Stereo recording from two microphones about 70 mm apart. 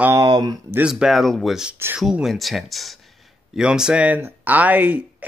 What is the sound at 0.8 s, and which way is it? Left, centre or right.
Speech, centre.